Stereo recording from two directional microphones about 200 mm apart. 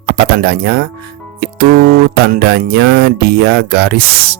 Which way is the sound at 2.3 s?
50° right (ahead or behind).